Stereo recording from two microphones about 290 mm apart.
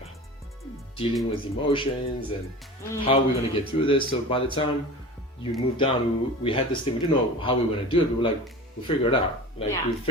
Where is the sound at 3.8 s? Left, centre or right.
Centre.